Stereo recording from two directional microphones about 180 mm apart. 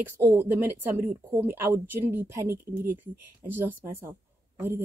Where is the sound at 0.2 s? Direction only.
15° right (ahead or behind).